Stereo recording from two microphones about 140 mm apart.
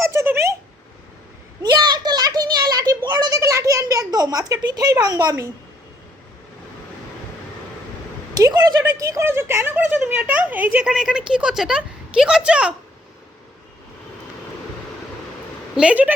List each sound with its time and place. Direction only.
0.1 s speech: 20° right (ahead or behind)
1.6 s a sound: 30° right (ahead or behind)
8.4 s a woman's voice: 25° right (ahead or behind); by 12.7 s 5° right (ahead or behind)
15.7 s a woman's voice: 10° right (ahead or behind)